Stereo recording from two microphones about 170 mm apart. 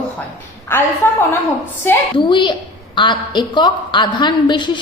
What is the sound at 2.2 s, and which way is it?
A woman's voice, 30° left (ahead or behind).